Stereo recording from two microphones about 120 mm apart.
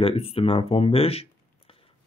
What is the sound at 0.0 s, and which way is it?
Speech, 55° left (ahead or behind).